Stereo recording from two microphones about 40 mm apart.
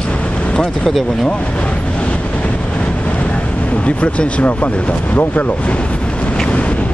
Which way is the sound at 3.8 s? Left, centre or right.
Left.